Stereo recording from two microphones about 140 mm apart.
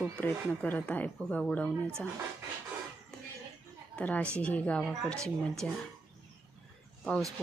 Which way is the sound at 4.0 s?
10° left (ahead or behind).